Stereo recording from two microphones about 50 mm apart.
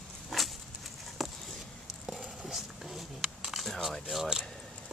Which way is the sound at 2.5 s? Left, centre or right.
Centre.